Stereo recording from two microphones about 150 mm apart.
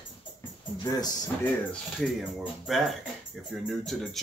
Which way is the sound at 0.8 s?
25° left (ahead or behind).